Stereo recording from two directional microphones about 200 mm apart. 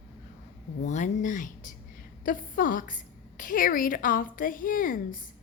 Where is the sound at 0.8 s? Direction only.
35° left (ahead or behind).